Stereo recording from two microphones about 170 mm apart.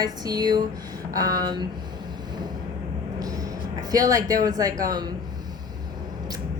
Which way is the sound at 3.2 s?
20° right (ahead or behind).